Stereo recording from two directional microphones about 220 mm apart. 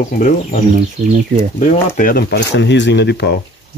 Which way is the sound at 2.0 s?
40° left (ahead or behind).